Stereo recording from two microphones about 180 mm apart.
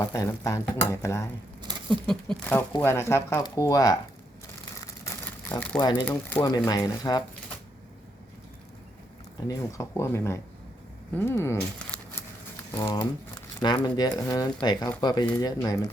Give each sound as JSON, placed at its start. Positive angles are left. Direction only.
{"t": 0.0, "sound": "speech", "side_deg": 20}
{"t": 1.9, "sound": "speech", "side_deg": 5}
{"t": 4.8, "sound": "a sound", "side_deg": 20}
{"t": 5.8, "sound": "speech", "side_deg": 25}
{"t": 6.1, "sound": "speech", "side_deg": 10}
{"t": 6.7, "sound": "speech", "side_deg": 20}
{"t": 9.5, "sound": "speech", "side_deg": 15}